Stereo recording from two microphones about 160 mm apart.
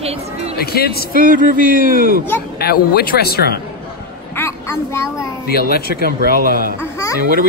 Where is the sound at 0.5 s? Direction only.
75° left (ahead or behind).